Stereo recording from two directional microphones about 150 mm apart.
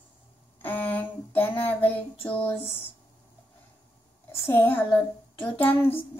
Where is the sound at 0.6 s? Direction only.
10° left (ahead or behind).